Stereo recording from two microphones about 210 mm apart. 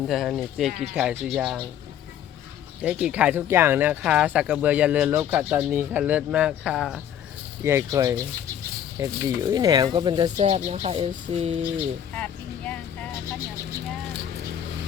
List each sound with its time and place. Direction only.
0.1 s speech: centre (ahead or behind)
2.8 s speech: 5° right (ahead or behind)
7.6 s speech: 15° right (ahead or behind)
10.3 s speech: 30° right (ahead or behind)
12.1 s vehicle: 5° left (ahead or behind)